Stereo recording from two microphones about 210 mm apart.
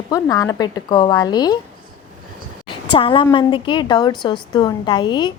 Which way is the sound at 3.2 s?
25° left (ahead or behind).